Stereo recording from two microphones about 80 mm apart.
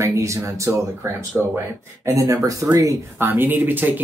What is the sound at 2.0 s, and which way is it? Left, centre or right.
Speech, right.